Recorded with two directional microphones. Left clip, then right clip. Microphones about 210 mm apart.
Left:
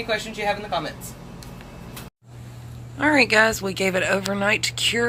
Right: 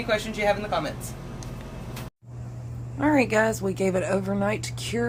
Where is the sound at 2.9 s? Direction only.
Centre (ahead or behind).